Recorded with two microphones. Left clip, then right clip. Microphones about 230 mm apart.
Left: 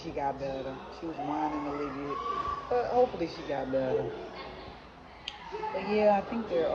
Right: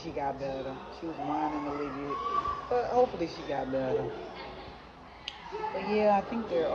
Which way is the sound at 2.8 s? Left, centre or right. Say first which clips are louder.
Even; right.